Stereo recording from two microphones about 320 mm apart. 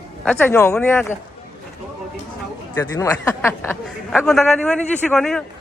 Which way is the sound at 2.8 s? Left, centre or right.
Centre.